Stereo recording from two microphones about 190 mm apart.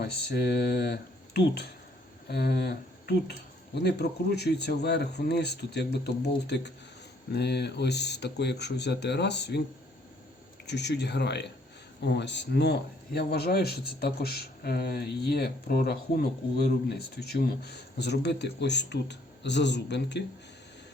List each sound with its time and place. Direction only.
0.0 s speech: 60° left (ahead or behind)
10.7 s speech: 65° left (ahead or behind)